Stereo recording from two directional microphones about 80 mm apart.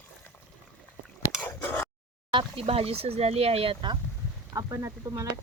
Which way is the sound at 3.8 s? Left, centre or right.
Right.